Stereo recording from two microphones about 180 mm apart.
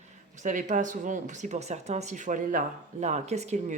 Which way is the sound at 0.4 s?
45° right (ahead or behind).